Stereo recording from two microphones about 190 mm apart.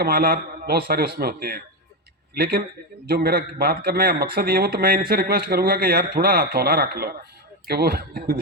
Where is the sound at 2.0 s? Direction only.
55° right (ahead or behind).